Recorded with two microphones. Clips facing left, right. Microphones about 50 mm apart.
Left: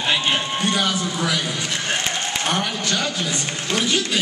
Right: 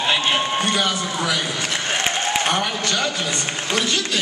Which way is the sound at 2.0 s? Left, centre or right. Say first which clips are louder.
Right 3 dB; right.